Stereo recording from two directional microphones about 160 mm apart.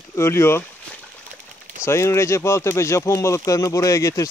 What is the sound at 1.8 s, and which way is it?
Speech, 15° left (ahead or behind).